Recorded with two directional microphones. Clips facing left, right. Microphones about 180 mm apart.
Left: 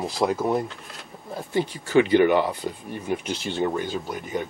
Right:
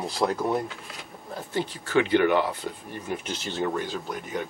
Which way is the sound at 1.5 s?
10° left (ahead or behind).